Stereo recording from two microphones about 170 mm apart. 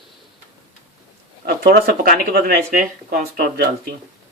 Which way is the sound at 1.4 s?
65° right (ahead or behind).